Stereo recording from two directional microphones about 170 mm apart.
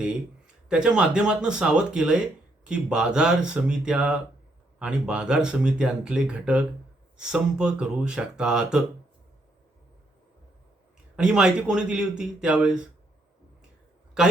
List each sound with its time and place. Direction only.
0.7 s speech: 5° right (ahead or behind)
11.2 s speech: 5° right (ahead or behind)